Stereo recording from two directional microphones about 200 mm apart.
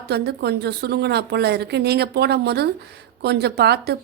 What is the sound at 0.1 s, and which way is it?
Speech, 55° right (ahead or behind).